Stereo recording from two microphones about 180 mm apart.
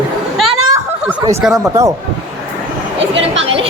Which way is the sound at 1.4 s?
5° right (ahead or behind).